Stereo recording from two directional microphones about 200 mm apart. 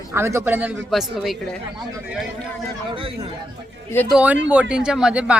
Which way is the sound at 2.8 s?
25° right (ahead or behind).